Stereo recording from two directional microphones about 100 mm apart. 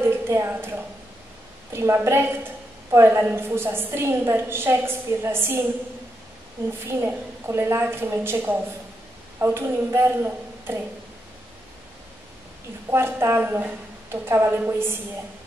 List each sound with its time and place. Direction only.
0.0 s a sound: 25° right (ahead or behind)
1.7 s a woman's voice: 25° right (ahead or behind)
6.9 s a woman's voice: 25° right (ahead or behind)
9.4 s a woman's voice: 25° right (ahead or behind)
12.9 s a woman's voice: 25° right (ahead or behind)